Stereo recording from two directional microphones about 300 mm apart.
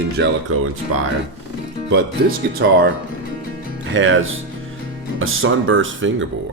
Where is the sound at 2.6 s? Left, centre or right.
Right.